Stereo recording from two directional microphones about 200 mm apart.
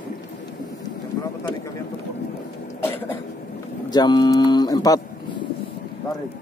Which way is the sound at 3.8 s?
20° left (ahead or behind).